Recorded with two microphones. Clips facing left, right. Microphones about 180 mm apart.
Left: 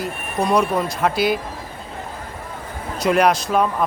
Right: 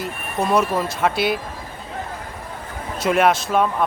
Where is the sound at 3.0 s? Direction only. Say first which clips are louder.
Left 1 dB; centre (ahead or behind).